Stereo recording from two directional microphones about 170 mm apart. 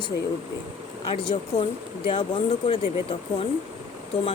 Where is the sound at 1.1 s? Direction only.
30° left (ahead or behind).